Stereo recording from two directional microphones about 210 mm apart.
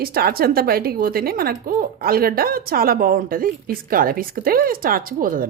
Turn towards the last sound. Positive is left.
turn(degrees=-40)  # may be behind; listen again after turning